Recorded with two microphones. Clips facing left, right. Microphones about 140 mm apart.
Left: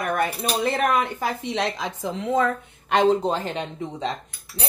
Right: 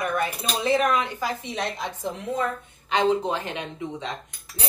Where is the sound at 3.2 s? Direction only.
35° left (ahead or behind).